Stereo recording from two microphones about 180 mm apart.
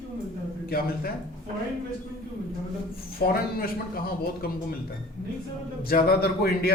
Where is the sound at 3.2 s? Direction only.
65° left (ahead or behind).